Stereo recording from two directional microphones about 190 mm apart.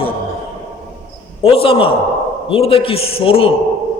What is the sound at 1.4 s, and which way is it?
A man's voice, 30° left (ahead or behind).